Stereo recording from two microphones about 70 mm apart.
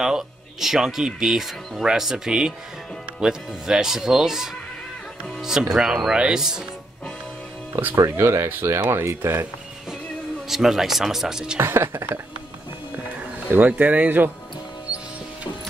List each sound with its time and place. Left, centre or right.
0.0 s speech: centre
8.2 s speech: right
10.5 s speech: centre
11.6 s speech: right
13.5 s speech: right